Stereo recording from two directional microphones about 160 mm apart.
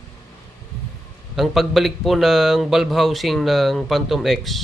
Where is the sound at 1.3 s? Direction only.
Centre (ahead or behind).